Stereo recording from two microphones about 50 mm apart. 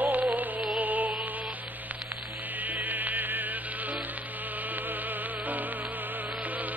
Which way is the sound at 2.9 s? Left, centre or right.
Right.